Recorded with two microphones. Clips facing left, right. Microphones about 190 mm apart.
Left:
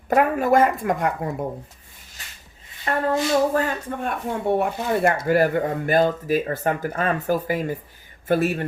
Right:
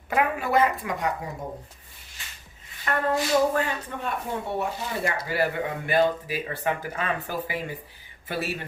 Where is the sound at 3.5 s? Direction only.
45° left (ahead or behind).